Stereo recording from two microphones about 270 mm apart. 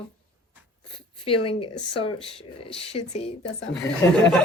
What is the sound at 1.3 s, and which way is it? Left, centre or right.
Speech, centre.